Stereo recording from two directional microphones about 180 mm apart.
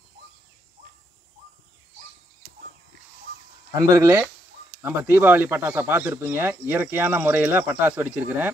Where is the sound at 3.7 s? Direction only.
20° right (ahead or behind).